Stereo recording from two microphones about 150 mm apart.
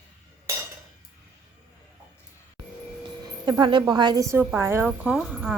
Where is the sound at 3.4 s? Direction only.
30° right (ahead or behind).